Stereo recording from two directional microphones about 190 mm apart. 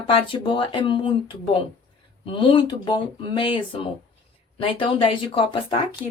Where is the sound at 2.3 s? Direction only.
25° left (ahead or behind).